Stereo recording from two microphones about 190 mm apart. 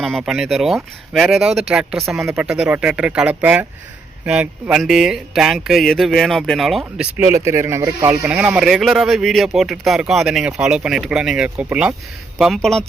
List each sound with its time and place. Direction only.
0.0 s speech: centre (ahead or behind); by 8.1 s 15° right (ahead or behind)
8.2 s speech: 5° right (ahead or behind)